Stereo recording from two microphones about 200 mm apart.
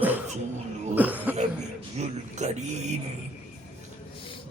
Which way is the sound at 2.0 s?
35° right (ahead or behind).